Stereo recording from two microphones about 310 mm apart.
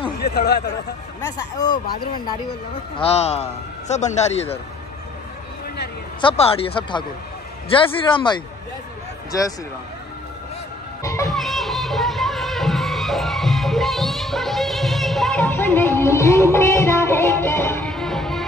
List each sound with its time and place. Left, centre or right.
0.2 s speech: left
1.2 s speech: centre
3.0 s a man's voice: centre
6.2 s speech: centre
11.0 s music: centre